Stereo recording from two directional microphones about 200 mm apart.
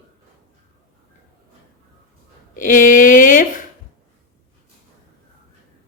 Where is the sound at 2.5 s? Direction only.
40° left (ahead or behind).